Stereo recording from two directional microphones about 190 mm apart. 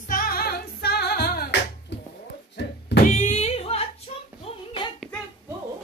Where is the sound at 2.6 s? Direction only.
60° left (ahead or behind).